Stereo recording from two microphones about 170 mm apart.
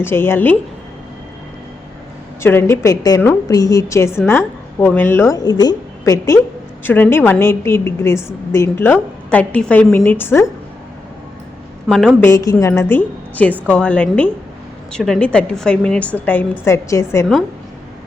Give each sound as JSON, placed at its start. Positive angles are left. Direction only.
{"t": 0.0, "sound": "a woman's voice", "side_deg": 15}
{"t": 2.4, "sound": "a woman's voice", "side_deg": 15}
{"t": 11.9, "sound": "a woman's voice", "side_deg": 5}
{"t": 12.3, "sound": "a woman's voice", "side_deg": 20}